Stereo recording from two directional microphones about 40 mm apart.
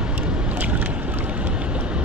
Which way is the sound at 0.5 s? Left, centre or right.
Right.